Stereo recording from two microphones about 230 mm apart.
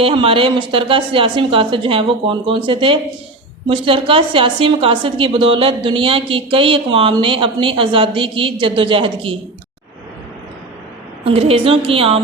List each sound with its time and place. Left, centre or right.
0.0 s a woman's voice: right
11.3 s a woman's voice: right